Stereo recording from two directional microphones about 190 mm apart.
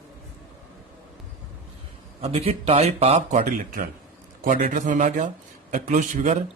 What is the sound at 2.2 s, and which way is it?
A man's voice, 35° right (ahead or behind).